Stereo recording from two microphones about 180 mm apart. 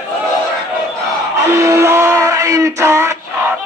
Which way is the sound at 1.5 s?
15° right (ahead or behind).